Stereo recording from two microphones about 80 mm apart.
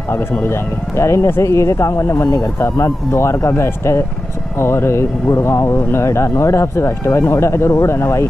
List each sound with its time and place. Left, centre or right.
0.1 s speech: left